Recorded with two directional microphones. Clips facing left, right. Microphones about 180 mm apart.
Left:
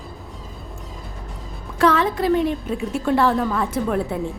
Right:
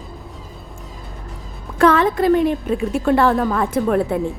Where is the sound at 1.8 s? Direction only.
50° right (ahead or behind).